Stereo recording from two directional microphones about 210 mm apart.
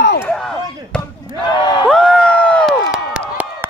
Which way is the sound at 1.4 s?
20° left (ahead or behind).